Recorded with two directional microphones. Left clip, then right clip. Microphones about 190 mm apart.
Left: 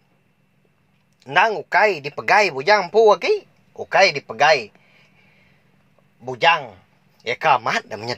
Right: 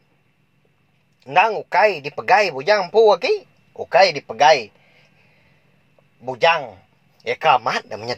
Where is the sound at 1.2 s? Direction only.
25° left (ahead or behind).